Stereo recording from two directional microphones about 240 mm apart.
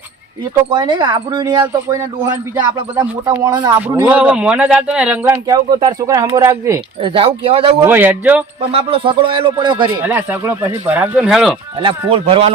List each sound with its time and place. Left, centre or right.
0.7 s a man's voice: centre
7.8 s a man's voice: centre
8.7 s a man's voice: right; by 11.5 s centre
11.8 s speech: right